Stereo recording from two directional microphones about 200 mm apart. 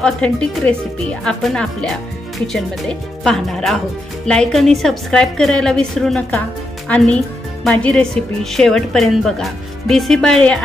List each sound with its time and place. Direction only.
0.0 s a woman's voice: 5° left (ahead or behind)